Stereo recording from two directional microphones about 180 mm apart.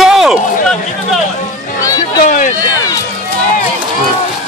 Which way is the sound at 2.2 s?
45° left (ahead or behind).